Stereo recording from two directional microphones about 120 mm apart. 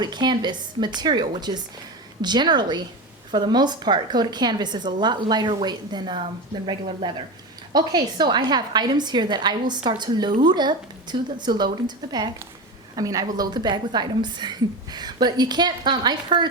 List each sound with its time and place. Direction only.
0.0 s a woman's voice: 35° right (ahead or behind)